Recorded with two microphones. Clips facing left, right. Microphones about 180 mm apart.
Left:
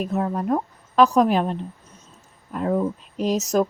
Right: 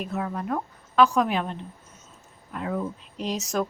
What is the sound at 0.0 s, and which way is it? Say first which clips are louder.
Speech: left 6 dB; 40° left (ahead or behind).